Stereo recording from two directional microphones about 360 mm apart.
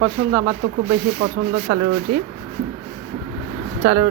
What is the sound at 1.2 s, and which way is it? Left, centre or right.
Speech, right.